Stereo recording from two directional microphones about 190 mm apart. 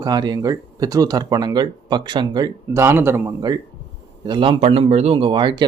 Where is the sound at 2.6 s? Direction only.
15° right (ahead or behind).